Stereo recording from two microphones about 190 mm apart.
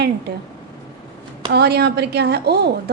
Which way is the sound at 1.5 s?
60° right (ahead or behind).